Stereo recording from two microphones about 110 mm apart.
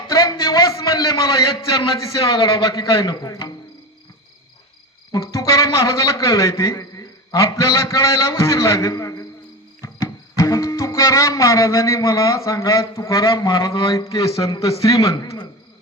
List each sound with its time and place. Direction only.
0.1 s a man's voice: 35° left (ahead or behind)
5.1 s a man's voice: 30° left (ahead or behind)
9.8 s music: 30° left (ahead or behind)
13.9 s a man's voice: 30° left (ahead or behind)